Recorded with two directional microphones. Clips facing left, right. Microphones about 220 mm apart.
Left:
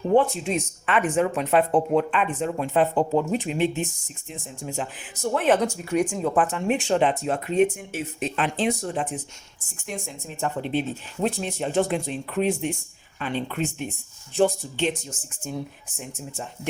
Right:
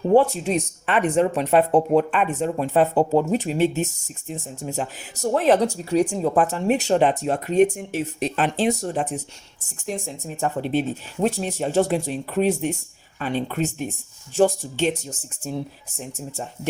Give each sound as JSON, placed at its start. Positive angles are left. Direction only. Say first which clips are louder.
{"t": 0.1, "sound": "speech", "louder": "right 3 dB", "side_deg": -40}